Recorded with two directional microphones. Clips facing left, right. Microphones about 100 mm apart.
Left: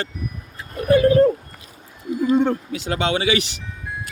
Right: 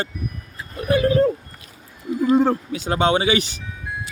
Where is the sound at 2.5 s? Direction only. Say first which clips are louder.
Right 1 dB; 40° right (ahead or behind).